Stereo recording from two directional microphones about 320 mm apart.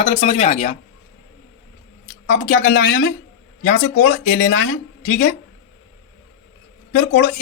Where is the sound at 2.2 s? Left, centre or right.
Left.